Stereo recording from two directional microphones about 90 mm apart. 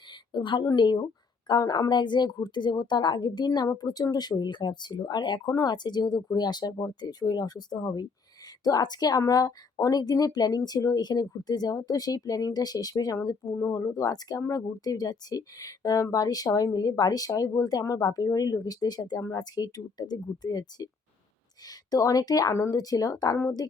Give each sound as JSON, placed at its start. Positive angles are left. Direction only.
{"t": 0.3, "sound": "a woman's voice", "side_deg": 55}